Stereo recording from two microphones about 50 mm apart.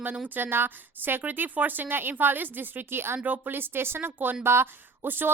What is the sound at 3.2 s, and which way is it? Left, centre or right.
A woman's voice, right.